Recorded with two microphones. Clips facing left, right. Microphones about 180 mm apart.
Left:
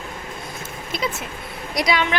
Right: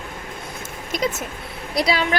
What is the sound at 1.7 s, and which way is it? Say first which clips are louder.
Speech: even; 30° right (ahead or behind).